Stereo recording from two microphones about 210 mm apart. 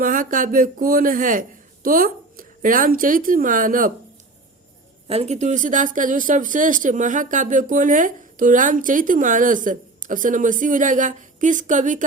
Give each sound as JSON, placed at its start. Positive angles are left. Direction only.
{"t": 0.0, "sound": "speech", "side_deg": -40}
{"t": 5.0, "sound": "speech", "side_deg": -30}